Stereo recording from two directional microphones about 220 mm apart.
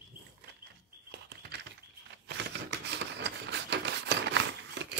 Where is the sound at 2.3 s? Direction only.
55° right (ahead or behind).